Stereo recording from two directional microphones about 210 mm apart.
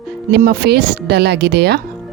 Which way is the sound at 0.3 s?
55° right (ahead or behind).